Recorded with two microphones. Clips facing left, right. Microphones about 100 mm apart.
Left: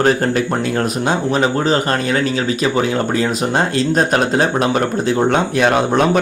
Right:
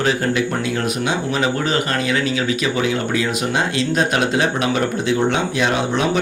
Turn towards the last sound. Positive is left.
turn(degrees=55)  # may be behind; listen again after turning